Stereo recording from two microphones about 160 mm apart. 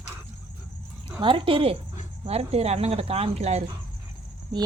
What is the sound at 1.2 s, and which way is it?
Speech, 30° right (ahead or behind).